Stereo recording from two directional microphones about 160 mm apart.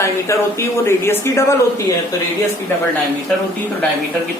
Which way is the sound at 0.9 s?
15° left (ahead or behind).